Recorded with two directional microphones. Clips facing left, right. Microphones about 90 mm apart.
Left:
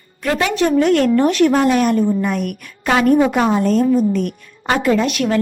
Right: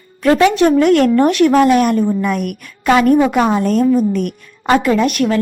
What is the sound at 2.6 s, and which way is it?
Speech, 45° right (ahead or behind).